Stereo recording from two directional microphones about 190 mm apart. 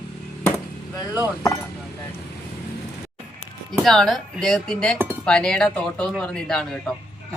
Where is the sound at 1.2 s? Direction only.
15° left (ahead or behind).